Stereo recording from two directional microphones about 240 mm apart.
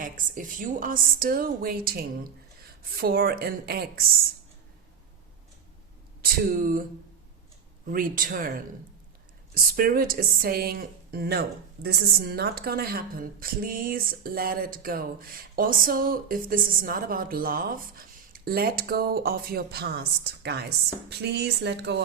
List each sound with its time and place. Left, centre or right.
0.0 s speech: right
6.2 s speech: right
7.9 s speech: right
9.7 s speech: right